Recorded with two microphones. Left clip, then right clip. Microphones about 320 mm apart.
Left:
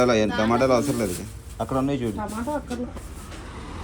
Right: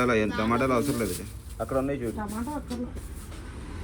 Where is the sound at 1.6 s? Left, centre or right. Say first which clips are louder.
Left 3 dB; left.